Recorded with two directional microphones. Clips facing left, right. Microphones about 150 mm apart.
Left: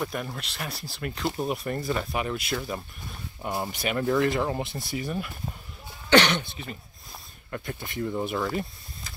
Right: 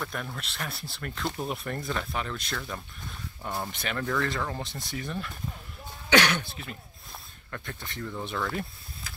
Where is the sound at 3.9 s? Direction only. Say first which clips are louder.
Left 6 dB; 20° left (ahead or behind).